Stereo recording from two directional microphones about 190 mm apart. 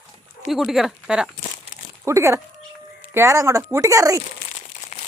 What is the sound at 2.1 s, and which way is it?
Speech, 15° right (ahead or behind).